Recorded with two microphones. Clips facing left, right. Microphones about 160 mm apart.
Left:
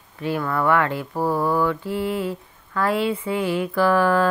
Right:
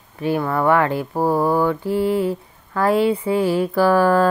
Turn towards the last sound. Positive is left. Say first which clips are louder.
# right 3 dB
turn(degrees=-35)  # may be behind; listen again after turning